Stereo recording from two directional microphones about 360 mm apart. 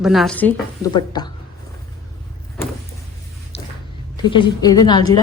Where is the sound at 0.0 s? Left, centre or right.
Centre.